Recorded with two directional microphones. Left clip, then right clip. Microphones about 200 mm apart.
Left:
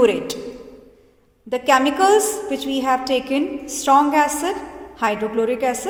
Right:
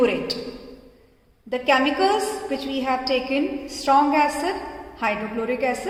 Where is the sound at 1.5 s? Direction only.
45° left (ahead or behind).